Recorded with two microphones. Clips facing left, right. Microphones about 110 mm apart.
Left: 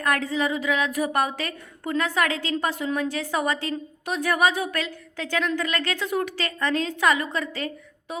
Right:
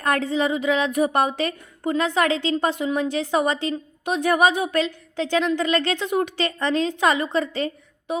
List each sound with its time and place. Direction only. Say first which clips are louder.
0.0 s a woman's voice: right 3 dB; 25° right (ahead or behind)